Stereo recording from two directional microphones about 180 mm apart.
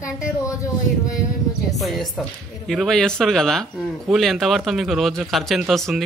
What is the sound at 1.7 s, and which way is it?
Speech, centre (ahead or behind).